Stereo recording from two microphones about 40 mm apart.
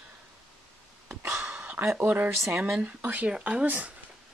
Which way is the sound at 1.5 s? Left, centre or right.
Right.